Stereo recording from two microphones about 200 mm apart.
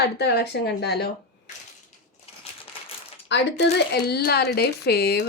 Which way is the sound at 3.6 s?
55° left (ahead or behind).